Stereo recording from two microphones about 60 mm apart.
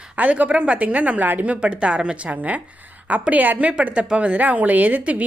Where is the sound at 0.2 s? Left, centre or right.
Right.